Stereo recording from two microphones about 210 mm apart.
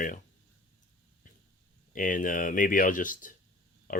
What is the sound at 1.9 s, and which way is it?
Speech, 40° left (ahead or behind).